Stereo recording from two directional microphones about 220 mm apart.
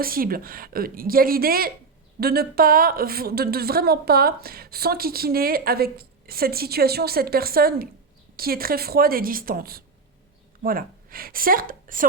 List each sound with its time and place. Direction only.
0.0 s a woman's voice: 40° right (ahead or behind)